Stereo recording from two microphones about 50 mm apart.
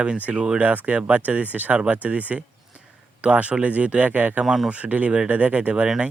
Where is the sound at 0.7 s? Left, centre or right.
Right.